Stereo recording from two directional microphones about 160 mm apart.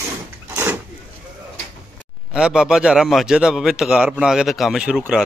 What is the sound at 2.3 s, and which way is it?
A man's voice, 5° right (ahead or behind).